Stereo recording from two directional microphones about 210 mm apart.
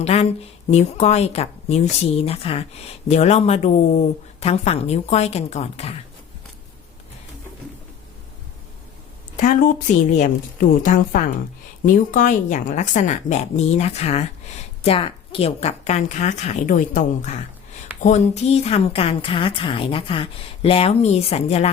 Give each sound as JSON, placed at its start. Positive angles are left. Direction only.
{"t": 0.0, "sound": "a woman's voice", "side_deg": 30}
{"t": 9.4, "sound": "a woman's voice", "side_deg": 40}